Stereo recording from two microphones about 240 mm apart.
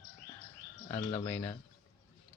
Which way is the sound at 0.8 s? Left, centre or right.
Left.